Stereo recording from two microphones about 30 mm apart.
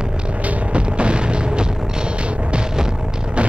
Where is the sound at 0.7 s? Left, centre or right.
Right.